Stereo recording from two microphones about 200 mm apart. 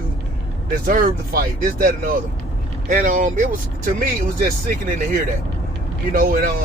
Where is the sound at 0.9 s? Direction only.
45° right (ahead or behind).